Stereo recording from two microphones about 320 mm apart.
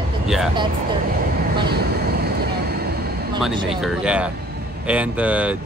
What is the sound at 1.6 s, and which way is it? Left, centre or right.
Vehicle, right.